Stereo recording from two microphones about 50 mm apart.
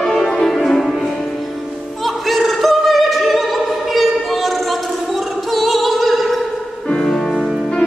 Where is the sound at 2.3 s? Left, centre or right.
Centre.